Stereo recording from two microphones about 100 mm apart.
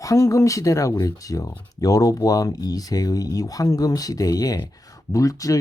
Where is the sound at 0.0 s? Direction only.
30° left (ahead or behind).